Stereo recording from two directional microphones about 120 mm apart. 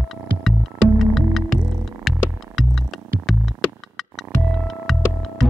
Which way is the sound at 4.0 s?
Centre (ahead or behind).